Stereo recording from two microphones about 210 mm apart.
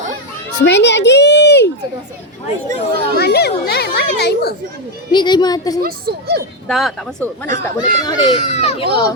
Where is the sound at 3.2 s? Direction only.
50° left (ahead or behind).